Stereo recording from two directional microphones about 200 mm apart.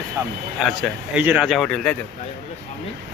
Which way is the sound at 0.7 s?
Centre (ahead or behind).